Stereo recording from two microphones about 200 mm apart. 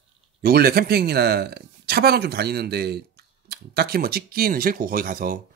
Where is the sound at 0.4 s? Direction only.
50° right (ahead or behind).